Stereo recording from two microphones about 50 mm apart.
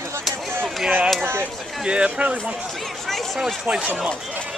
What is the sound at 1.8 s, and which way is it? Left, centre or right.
Speech, right.